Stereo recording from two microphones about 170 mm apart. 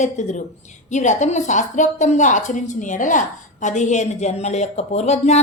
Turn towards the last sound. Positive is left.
turn(degrees=40)  # may be behind; listen again after turning